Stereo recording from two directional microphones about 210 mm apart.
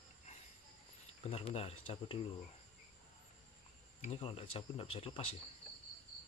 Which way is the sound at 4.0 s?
25° left (ahead or behind).